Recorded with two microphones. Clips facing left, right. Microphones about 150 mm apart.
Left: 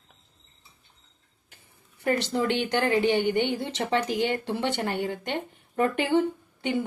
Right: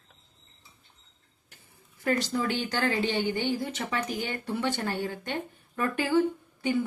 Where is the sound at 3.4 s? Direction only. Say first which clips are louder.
Left 2 dB; 25° left (ahead or behind).